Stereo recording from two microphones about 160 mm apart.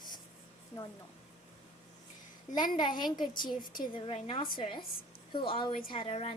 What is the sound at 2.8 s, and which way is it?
A woman's voice, 30° left (ahead or behind).